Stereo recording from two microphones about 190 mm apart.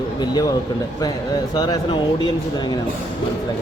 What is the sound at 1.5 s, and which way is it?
Speech, 20° left (ahead or behind).